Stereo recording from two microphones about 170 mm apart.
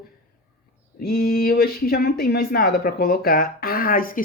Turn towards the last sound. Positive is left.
turn(degrees=55)  # may be behind; listen again after turning